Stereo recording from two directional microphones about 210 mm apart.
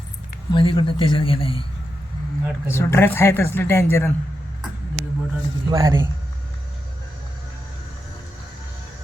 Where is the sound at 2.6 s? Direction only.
10° left (ahead or behind).